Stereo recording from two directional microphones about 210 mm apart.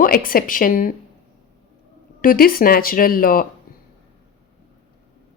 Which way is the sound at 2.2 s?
45° left (ahead or behind).